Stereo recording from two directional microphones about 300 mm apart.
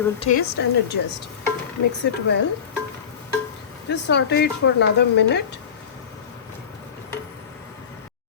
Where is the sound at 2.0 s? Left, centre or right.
Left.